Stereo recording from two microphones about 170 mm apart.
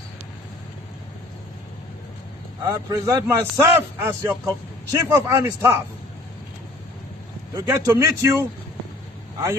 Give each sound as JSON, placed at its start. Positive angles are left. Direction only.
{"t": 2.7, "sound": "a man's voice", "side_deg": -20}
{"t": 7.5, "sound": "a man's voice", "side_deg": -15}